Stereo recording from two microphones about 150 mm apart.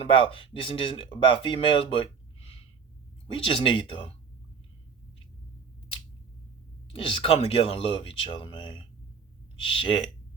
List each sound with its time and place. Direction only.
0.0 s speech: 35° left (ahead or behind)
3.3 s speech: 35° left (ahead or behind)
6.9 s speech: 35° left (ahead or behind)